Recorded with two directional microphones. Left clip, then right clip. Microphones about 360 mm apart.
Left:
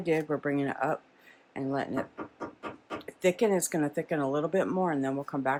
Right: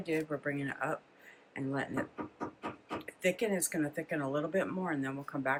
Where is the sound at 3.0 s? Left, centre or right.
Centre.